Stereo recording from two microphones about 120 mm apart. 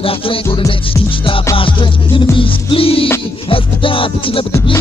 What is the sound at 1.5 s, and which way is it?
Music, 45° left (ahead or behind).